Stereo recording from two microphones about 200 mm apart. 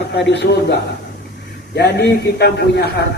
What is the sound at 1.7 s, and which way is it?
A man's voice, 55° left (ahead or behind).